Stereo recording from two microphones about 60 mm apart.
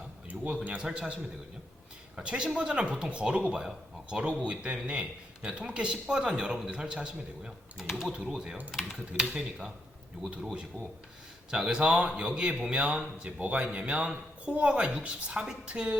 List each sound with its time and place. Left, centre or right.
0.3 s speech: right
2.1 s a man's voice: centre